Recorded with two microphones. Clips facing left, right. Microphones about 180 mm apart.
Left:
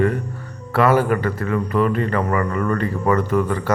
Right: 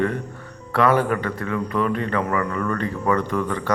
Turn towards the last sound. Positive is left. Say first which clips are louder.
# left 4 dB
turn(degrees=5)  # may be behind; listen again after turning